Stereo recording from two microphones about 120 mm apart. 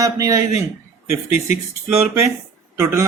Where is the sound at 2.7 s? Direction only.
25° right (ahead or behind).